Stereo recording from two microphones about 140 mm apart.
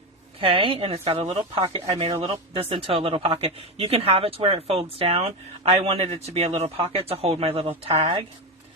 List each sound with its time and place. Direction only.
0.3 s speech: 40° right (ahead or behind)